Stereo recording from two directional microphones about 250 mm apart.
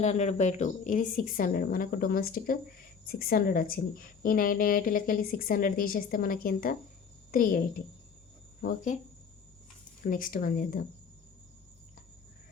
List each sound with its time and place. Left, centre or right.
0.0 s a woman's voice: left
8.6 s a woman's voice: left
10.0 s a woman's voice: left